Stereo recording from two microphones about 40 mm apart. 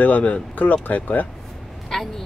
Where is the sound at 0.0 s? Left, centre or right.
Left.